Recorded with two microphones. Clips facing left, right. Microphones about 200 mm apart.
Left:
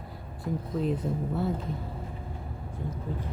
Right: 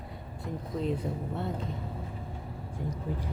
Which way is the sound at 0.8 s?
Centre (ahead or behind).